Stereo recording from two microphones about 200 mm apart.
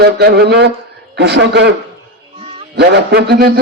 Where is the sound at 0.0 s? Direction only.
55° right (ahead or behind).